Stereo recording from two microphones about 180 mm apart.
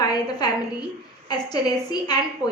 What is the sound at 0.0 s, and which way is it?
A woman's voice, 20° left (ahead or behind).